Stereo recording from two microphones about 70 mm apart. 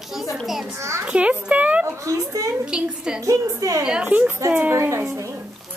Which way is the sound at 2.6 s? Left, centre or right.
Centre.